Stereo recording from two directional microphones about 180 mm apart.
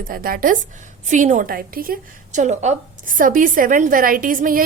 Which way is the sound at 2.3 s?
40° right (ahead or behind).